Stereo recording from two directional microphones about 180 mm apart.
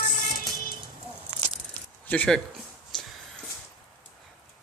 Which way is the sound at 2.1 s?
5° left (ahead or behind).